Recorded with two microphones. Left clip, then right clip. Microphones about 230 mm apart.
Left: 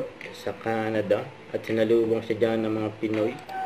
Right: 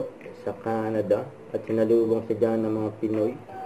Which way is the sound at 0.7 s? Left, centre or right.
Left.